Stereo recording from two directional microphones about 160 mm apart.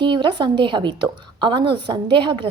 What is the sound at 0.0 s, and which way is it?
A woman's voice, 30° right (ahead or behind).